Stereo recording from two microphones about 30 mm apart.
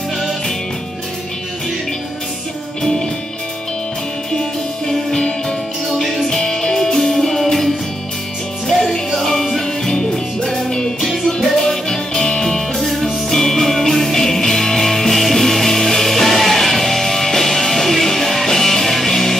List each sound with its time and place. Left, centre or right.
5.9 s music: centre